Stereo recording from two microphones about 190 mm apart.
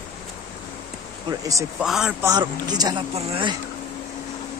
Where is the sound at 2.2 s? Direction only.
20° right (ahead or behind).